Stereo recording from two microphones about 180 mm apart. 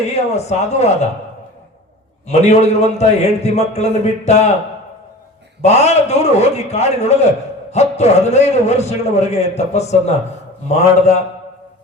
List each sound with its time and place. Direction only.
0.3 s a man's voice: 40° left (ahead or behind)
2.2 s a man's voice: 40° left (ahead or behind)
5.6 s a man's voice: 35° left (ahead or behind)